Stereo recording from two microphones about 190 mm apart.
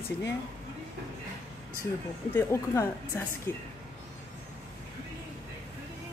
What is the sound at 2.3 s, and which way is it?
Speech, 15° left (ahead or behind).